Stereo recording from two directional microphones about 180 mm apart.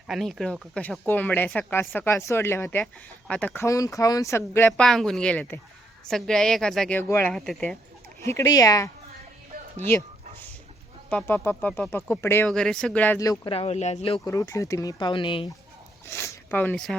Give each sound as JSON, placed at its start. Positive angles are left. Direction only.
{"t": 0.1, "sound": "speech", "side_deg": 0}
{"t": 4.8, "sound": "a woman's voice", "side_deg": 0}
{"t": 8.2, "sound": "speech", "side_deg": 15}
{"t": 11.1, "sound": "speech", "side_deg": 5}
{"t": 13.4, "sound": "speech", "side_deg": 30}
{"t": 14.3, "sound": "speech", "side_deg": 20}
{"t": 16.0, "sound": "speech", "side_deg": 15}